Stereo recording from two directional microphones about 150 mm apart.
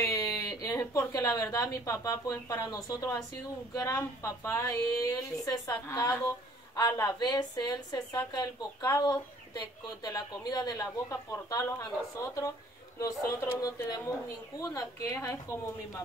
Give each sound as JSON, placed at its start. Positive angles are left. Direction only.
{"t": 0.0, "sound": "a woman's voice", "side_deg": 20}
{"t": 13.0, "sound": "a woman's voice", "side_deg": 20}